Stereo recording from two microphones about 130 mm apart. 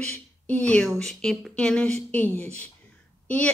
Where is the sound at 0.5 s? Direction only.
5° left (ahead or behind).